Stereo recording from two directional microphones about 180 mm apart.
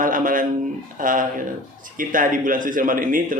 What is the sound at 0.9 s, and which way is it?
Speech, 50° right (ahead or behind).